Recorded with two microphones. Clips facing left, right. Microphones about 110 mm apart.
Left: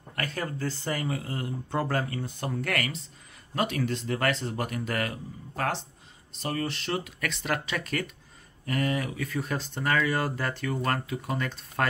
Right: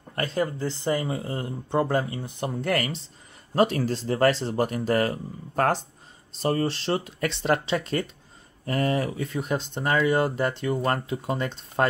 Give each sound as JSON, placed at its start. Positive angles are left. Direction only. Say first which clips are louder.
{"t": 0.1, "sound": "speech", "louder": "right 6 dB", "side_deg": -25}